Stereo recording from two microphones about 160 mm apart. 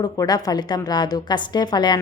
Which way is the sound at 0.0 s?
25° left (ahead or behind).